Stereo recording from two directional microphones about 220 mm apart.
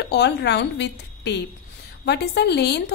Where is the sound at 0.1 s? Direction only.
50° left (ahead or behind).